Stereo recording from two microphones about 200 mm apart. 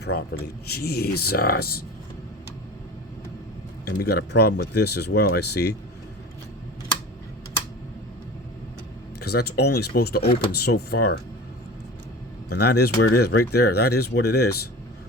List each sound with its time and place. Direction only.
0.0 s a man's voice: 55° left (ahead or behind)
3.8 s speech: 50° left (ahead or behind)
9.2 s speech: 55° left (ahead or behind)
12.5 s speech: 50° left (ahead or behind)